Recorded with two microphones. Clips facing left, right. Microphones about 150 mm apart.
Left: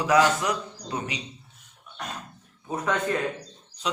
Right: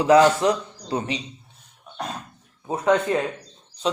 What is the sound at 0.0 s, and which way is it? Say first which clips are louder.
A man's voice: right 6 dB; 30° right (ahead or behind).